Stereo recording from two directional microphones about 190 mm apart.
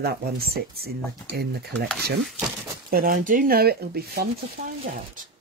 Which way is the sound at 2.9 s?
50° right (ahead or behind).